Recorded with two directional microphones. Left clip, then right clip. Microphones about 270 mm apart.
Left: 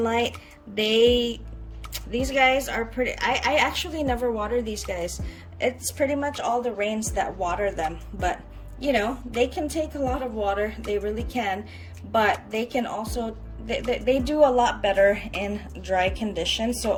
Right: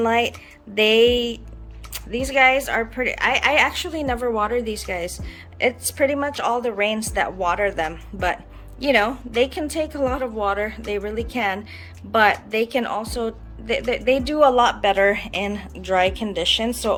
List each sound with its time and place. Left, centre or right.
0.0 s a woman's voice: centre